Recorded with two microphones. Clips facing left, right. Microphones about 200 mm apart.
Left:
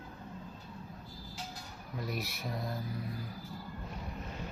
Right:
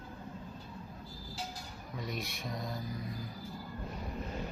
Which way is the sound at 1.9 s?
5° left (ahead or behind).